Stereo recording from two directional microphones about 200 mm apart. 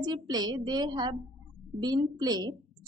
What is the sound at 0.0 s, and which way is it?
A woman's voice, 20° right (ahead or behind).